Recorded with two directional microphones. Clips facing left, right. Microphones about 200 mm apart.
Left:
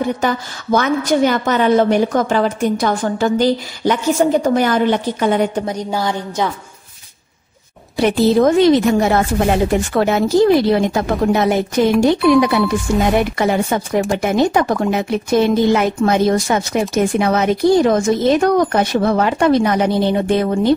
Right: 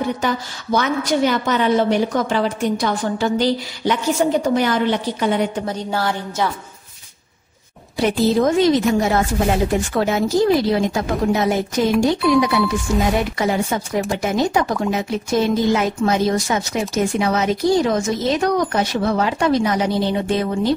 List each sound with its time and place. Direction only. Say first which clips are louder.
0.2 s a woman's voice: left 3 dB; 50° left (ahead or behind)
5.7 s a woman's voice: left 2 dB; 15° left (ahead or behind)
8.0 s a woman's voice: left 4 dB; 65° left (ahead or behind)